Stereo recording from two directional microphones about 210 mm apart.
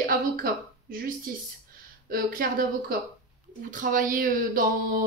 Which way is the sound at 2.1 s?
40° right (ahead or behind).